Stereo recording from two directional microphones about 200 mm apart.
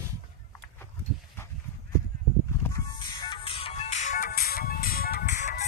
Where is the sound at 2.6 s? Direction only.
20° left (ahead or behind); by 5.6 s 35° left (ahead or behind).